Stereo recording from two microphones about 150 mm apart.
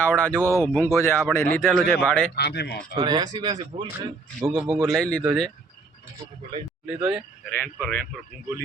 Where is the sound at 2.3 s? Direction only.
90° left.